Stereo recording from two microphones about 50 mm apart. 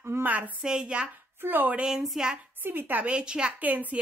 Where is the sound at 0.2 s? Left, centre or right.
Right.